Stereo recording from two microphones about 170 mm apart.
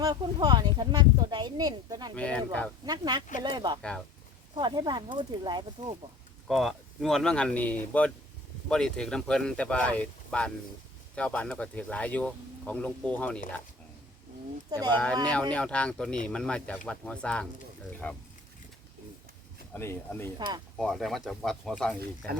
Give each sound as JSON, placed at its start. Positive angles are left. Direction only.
{"t": 0.0, "sound": "speech", "side_deg": -25}
{"t": 2.1, "sound": "speech", "side_deg": 5}
{"t": 2.8, "sound": "speech", "side_deg": -25}
{"t": 3.8, "sound": "speech", "side_deg": 5}
{"t": 4.5, "sound": "speech", "side_deg": -25}
{"t": 6.5, "sound": "speech", "side_deg": 0}
{"t": 14.7, "sound": "speech", "side_deg": -25}
{"t": 15.5, "sound": "speech", "side_deg": 5}
{"t": 19.7, "sound": "speech", "side_deg": 15}
{"t": 20.7, "sound": "speech", "side_deg": 0}